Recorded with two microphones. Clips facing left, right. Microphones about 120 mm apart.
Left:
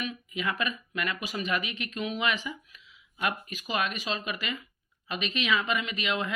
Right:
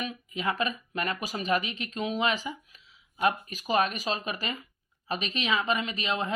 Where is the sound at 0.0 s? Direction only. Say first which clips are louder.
Right 1 dB; 35° right (ahead or behind).